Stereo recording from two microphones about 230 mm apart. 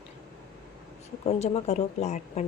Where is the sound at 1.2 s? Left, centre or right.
Left.